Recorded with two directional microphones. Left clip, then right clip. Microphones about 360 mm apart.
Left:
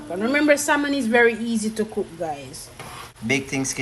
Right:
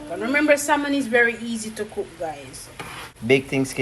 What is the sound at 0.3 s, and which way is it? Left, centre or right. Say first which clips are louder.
A woman's voice: even; left.